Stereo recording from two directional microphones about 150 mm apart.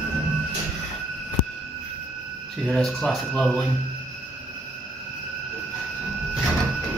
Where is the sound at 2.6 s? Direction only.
Centre (ahead or behind).